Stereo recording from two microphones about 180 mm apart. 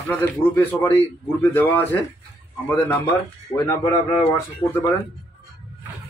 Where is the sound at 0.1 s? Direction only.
10° left (ahead or behind).